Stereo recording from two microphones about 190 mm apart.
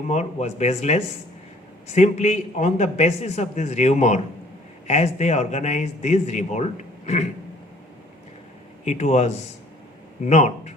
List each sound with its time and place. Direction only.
0.1 s a man's voice: 35° left (ahead or behind)
8.8 s a man's voice: 40° left (ahead or behind)